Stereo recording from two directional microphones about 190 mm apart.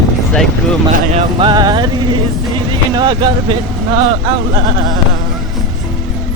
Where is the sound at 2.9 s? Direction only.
25° right (ahead or behind).